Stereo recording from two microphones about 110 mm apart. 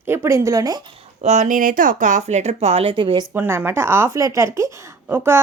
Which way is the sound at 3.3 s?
20° right (ahead or behind).